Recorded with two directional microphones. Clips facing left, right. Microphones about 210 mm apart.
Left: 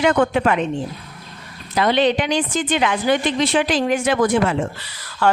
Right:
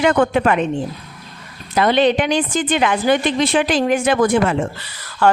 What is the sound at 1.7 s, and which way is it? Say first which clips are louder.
Speech: right 2 dB; 50° right (ahead or behind).